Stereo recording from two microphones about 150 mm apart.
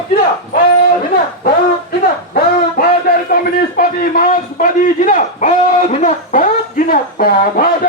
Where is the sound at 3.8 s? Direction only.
75° left (ahead or behind).